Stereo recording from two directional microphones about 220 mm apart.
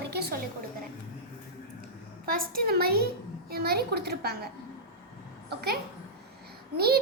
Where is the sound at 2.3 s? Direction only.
40° right (ahead or behind).